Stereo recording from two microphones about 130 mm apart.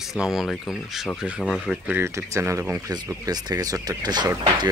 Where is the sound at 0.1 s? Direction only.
5° right (ahead or behind).